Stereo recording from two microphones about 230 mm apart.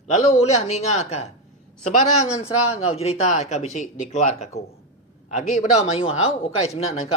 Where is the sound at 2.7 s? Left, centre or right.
Left.